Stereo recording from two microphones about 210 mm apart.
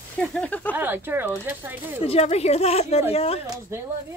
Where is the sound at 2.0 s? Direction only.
30° left (ahead or behind).